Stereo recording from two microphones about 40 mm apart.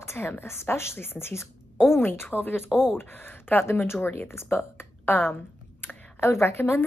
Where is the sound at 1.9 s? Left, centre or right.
Left.